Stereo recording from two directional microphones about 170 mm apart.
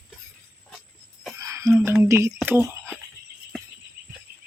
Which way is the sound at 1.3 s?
20° right (ahead or behind).